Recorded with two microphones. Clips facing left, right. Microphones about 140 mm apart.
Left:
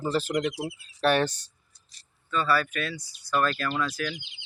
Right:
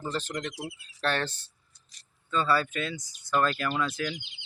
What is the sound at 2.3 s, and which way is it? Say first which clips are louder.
Speech: left 1 dB; 25° right (ahead or behind).